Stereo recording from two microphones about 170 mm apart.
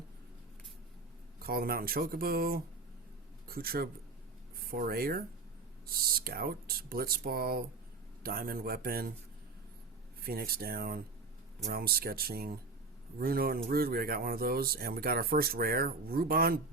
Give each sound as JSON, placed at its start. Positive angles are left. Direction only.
{"t": 1.4, "sound": "speech", "side_deg": -60}
{"t": 10.2, "sound": "speech", "side_deg": -65}